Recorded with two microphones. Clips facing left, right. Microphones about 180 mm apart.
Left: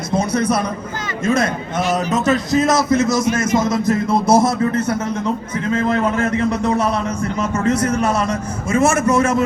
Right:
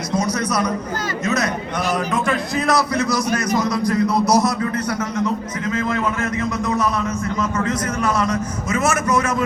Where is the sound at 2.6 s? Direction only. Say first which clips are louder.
Left 3 dB; 20° left (ahead or behind).